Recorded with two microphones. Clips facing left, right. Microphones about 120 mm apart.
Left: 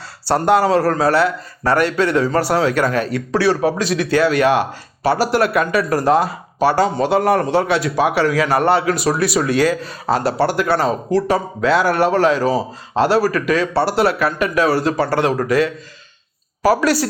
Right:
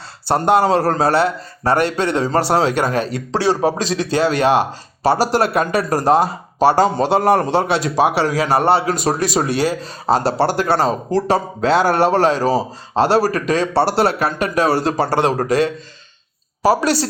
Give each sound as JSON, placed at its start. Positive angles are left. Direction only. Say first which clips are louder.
{"t": 0.3, "sound": "a man's voice", "louder": "even", "side_deg": -20}